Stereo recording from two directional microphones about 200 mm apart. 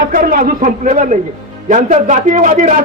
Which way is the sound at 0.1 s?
45° right (ahead or behind).